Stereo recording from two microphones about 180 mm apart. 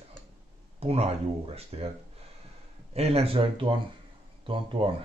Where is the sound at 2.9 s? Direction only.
35° right (ahead or behind).